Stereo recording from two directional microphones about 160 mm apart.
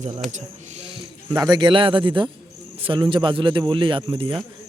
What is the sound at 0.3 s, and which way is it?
Speech, 50° right (ahead or behind).